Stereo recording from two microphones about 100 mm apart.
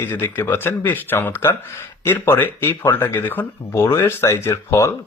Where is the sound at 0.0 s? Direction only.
25° left (ahead or behind).